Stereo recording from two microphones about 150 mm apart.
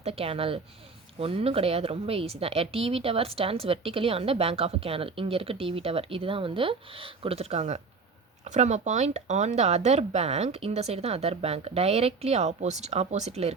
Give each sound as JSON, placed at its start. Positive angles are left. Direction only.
{"t": 0.0, "sound": "a woman's voice", "side_deg": -40}